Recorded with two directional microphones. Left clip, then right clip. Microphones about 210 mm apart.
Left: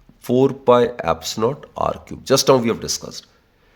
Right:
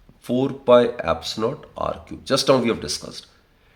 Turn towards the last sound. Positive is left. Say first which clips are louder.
# left 3 dB
turn(degrees=35)  # may be behind; listen again after turning